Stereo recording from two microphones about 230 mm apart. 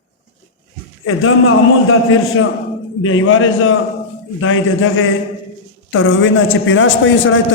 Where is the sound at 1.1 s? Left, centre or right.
Left.